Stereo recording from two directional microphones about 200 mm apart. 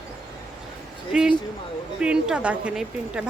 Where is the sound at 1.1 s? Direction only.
5° right (ahead or behind).